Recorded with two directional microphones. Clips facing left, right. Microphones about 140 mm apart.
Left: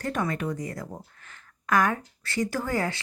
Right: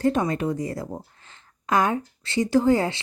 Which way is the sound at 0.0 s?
25° right (ahead or behind).